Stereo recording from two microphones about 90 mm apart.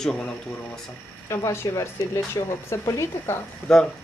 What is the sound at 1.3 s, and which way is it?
Speech, 35° left (ahead or behind).